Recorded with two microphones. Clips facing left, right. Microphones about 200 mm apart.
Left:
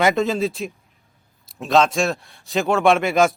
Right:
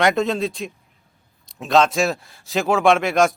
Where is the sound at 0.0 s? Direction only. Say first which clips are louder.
Even; centre (ahead or behind).